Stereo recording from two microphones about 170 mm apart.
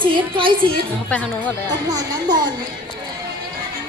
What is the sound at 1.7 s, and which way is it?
Speech, 25° right (ahead or behind).